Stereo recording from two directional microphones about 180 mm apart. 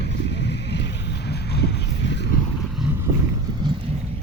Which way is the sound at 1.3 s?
65° left (ahead or behind).